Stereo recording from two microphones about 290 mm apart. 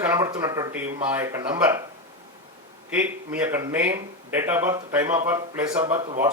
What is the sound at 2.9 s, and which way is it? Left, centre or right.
A man's voice, centre.